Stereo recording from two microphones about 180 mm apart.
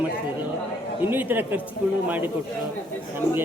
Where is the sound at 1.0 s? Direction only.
10° right (ahead or behind).